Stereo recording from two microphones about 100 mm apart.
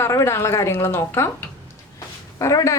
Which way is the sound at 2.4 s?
30° left (ahead or behind).